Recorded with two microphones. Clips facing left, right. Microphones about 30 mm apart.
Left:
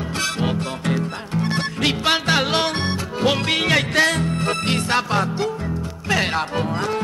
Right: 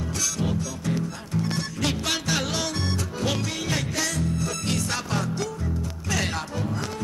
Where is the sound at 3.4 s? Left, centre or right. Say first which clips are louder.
Left 10 dB; left.